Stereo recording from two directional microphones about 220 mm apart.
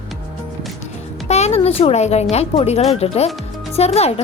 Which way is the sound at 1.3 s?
30° left (ahead or behind).